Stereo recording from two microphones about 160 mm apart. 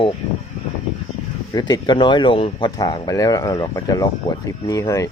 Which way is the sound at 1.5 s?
25° left (ahead or behind).